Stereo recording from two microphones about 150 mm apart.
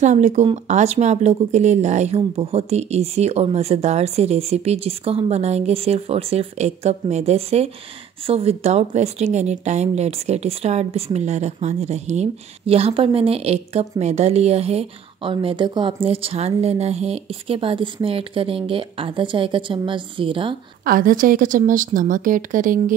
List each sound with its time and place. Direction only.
0.0 s speech: 55° right (ahead or behind); by 20.5 s 35° right (ahead or behind)
20.8 s a woman's voice: 70° right (ahead or behind)